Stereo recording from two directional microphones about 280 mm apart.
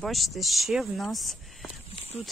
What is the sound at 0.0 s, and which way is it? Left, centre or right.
Speech, centre.